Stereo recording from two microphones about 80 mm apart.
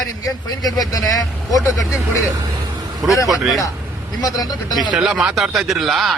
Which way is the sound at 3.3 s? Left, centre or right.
Centre.